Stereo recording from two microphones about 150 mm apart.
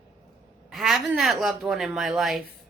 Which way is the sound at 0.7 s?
Centre (ahead or behind).